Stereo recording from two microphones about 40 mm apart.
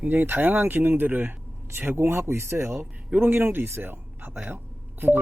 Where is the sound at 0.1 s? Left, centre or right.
Right.